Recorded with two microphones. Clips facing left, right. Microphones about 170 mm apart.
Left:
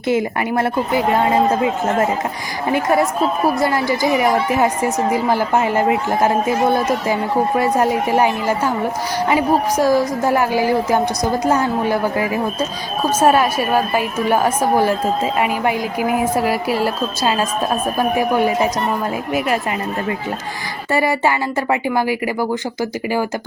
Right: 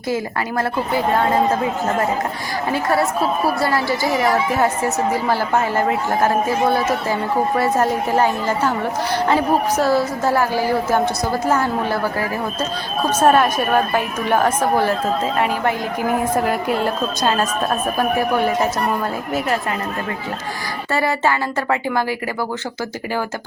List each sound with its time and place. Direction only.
0.1 s a woman's voice: 20° left (ahead or behind)
2.7 s a woman's voice: 20° left (ahead or behind)
20.9 s a woman's voice: 15° left (ahead or behind)